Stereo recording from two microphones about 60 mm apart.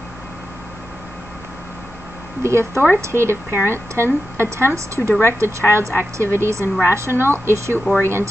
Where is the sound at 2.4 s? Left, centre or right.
Right.